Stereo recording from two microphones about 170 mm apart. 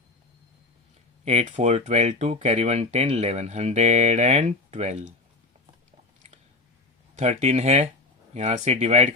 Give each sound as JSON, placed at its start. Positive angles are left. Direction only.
{"t": 1.2, "sound": "speech", "side_deg": -40}
{"t": 7.2, "sound": "speech", "side_deg": -40}